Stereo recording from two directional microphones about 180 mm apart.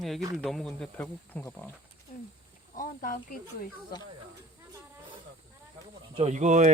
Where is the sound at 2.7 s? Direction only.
50° left (ahead or behind).